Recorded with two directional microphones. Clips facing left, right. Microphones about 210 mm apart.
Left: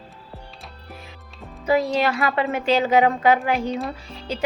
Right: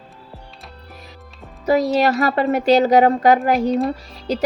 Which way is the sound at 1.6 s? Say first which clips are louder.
Right 4 dB; 40° right (ahead or behind).